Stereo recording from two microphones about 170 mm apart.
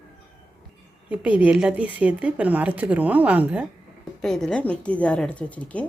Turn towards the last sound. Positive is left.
turn(degrees=10)  # may be behind; listen again after turning